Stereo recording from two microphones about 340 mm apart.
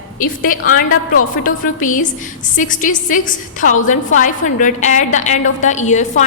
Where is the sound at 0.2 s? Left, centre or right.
Left.